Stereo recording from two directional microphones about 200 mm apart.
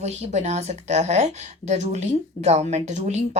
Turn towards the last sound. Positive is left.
turn(degrees=-35)  # may be behind; listen again after turning